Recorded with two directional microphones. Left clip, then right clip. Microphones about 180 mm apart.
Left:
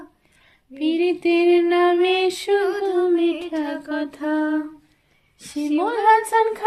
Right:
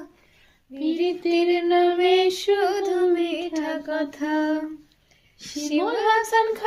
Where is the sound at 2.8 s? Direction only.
60° left (ahead or behind).